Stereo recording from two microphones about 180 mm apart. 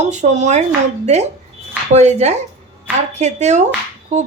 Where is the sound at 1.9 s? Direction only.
40° right (ahead or behind).